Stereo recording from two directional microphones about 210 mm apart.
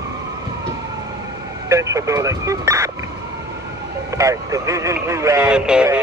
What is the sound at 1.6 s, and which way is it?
Speech, 15° right (ahead or behind).